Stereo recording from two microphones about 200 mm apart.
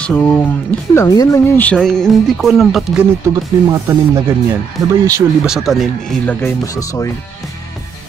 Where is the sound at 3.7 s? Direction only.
15° right (ahead or behind).